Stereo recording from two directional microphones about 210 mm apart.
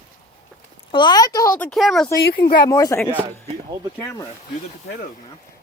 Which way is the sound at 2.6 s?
15° left (ahead or behind).